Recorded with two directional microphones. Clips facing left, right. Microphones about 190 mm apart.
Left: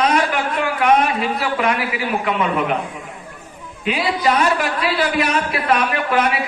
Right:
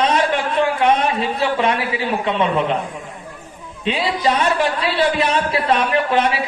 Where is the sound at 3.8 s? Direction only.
30° right (ahead or behind).